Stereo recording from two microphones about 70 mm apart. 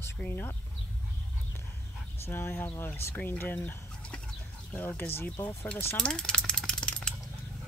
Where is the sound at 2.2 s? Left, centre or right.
Left.